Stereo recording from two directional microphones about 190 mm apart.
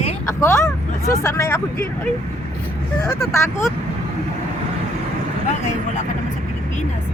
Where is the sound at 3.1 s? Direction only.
15° left (ahead or behind).